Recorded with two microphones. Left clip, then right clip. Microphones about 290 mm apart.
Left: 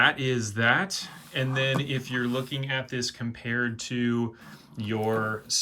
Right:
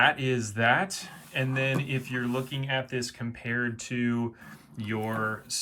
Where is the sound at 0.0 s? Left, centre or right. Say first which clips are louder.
Left 1 dB; centre.